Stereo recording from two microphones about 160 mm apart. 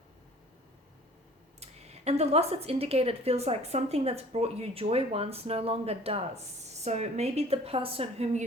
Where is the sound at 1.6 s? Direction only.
40° right (ahead or behind).